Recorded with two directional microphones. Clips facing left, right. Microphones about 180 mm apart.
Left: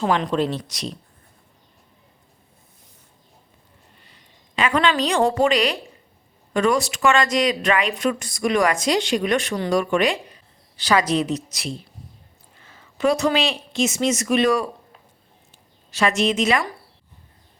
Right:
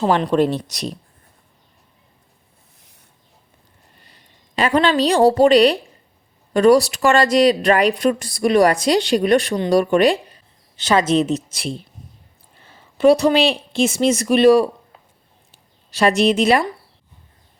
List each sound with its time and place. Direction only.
0.0 s speech: 35° right (ahead or behind)
0.3 s speech: 55° right (ahead or behind)
4.0 s a woman's voice: 40° right (ahead or behind)
10.8 s a woman's voice: 25° right (ahead or behind)
15.9 s speech: 35° right (ahead or behind)